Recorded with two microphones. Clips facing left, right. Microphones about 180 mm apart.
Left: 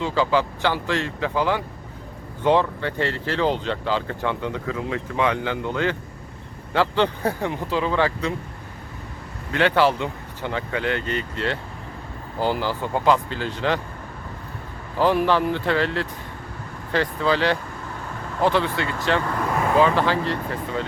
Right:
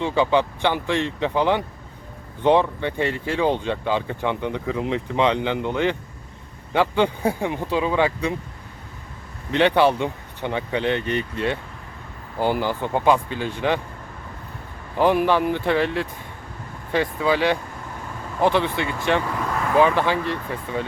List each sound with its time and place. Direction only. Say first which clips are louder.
0.0 s speech: right 2 dB; 20° right (ahead or behind)
9.5 s speech: right 2 dB; 20° right (ahead or behind)
14.9 s speech: right 1 dB; 15° right (ahead or behind)